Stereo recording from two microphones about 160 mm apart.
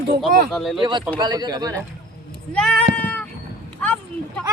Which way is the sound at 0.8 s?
30° right (ahead or behind).